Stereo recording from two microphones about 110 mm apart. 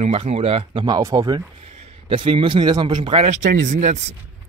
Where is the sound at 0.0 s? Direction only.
65° right (ahead or behind).